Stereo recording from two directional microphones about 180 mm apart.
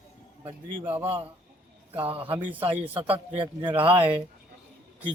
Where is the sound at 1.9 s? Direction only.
30° right (ahead or behind).